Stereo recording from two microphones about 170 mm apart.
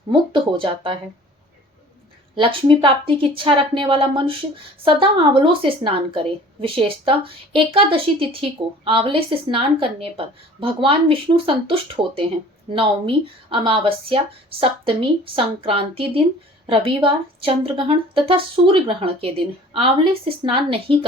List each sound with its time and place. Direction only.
0.1 s speech: 30° right (ahead or behind)
2.3 s a woman's voice: 30° right (ahead or behind)